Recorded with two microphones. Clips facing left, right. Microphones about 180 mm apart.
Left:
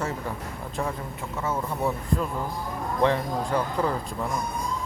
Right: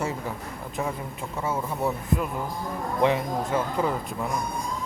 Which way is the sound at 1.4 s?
10° right (ahead or behind).